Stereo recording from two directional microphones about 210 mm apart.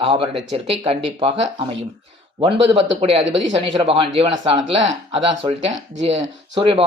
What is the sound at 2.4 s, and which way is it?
Speech, 25° right (ahead or behind).